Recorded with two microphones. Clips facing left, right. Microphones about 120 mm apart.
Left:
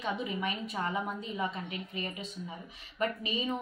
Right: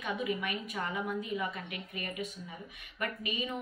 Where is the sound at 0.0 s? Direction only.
25° left (ahead or behind).